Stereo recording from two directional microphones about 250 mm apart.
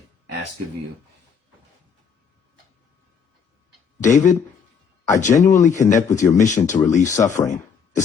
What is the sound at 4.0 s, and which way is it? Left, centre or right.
Speech, left.